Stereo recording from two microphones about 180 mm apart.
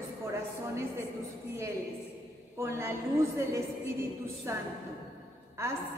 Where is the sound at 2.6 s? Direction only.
15° right (ahead or behind).